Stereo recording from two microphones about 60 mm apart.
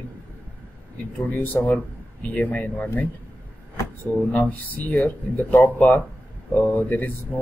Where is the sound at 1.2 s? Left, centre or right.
Left.